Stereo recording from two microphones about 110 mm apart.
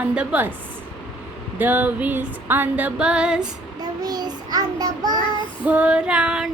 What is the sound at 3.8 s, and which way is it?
Child singing, 35° right (ahead or behind).